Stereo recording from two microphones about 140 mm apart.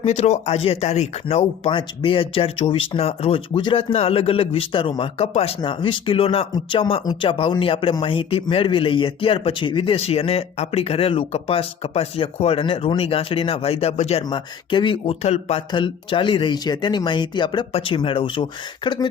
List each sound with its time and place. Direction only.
0.0 s speech: 50° left (ahead or behind)
14.3 s speech: 35° left (ahead or behind)